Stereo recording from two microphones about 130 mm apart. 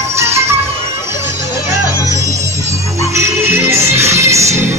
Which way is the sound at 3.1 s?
20° right (ahead or behind).